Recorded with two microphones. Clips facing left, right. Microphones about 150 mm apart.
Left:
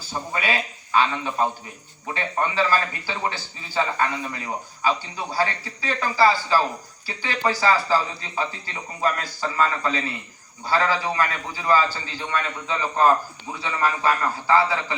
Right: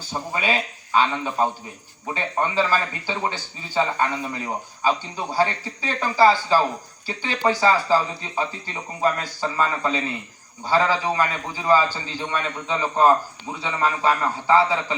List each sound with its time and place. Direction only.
0.1 s a man's voice: 20° right (ahead or behind)